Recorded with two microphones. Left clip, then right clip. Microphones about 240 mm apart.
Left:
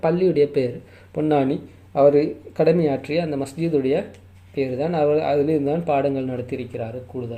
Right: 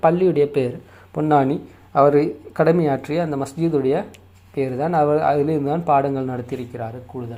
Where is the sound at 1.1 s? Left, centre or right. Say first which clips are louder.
Right 3 dB; right.